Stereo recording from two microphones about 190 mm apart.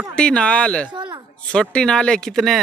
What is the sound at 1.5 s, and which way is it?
Speech, 5° left (ahead or behind).